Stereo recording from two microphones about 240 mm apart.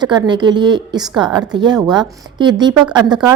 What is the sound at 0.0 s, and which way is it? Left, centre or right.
A woman's voice, centre.